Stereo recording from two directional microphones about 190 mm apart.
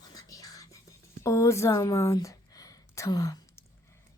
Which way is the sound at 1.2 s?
15° left (ahead or behind).